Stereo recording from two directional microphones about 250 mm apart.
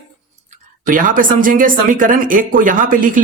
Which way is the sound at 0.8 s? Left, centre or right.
Right.